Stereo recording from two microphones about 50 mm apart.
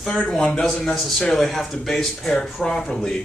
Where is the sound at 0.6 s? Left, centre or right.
Left.